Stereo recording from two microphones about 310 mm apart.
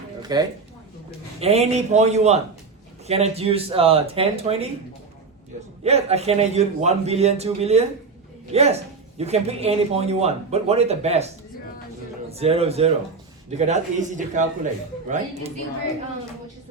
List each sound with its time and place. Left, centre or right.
0.2 s a sound: centre
1.4 s speech: centre
5.8 s speech: centre
12.3 s speech: centre